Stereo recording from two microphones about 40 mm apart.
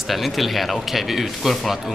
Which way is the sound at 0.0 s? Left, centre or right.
Centre.